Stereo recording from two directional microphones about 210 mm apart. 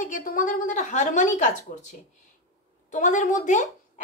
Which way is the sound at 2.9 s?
35° left (ahead or behind).